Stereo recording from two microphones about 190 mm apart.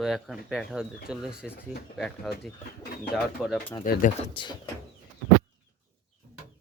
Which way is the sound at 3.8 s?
45° left (ahead or behind).